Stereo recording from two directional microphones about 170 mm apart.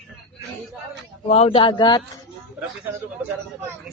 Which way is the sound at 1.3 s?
35° left (ahead or behind).